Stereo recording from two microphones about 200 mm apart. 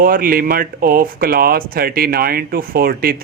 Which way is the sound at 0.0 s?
45° right (ahead or behind).